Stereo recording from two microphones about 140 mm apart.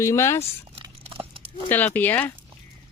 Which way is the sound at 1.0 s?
40° right (ahead or behind).